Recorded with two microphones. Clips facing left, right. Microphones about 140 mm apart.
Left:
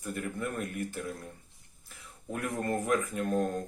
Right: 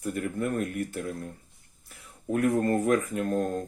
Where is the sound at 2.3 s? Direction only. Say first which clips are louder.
Right 8 dB; 45° right (ahead or behind).